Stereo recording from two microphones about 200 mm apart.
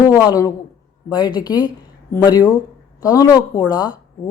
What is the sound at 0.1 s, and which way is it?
Speech, 15° left (ahead or behind).